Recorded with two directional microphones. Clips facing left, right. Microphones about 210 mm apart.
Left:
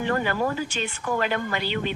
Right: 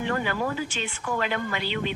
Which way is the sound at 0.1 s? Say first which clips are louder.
Left 4 dB; 45° left (ahead or behind).